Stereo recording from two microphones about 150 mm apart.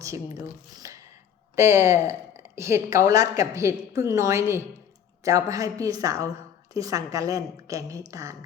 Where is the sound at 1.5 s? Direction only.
20° right (ahead or behind).